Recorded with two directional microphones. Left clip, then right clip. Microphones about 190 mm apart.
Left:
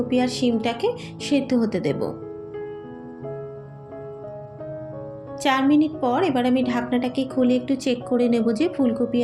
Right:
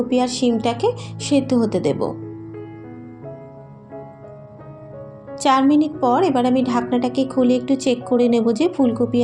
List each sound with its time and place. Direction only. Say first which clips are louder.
0.1 s a woman's voice: right 3 dB; 30° right (ahead or behind)
5.4 s a woman's voice: right 4 dB; 30° right (ahead or behind)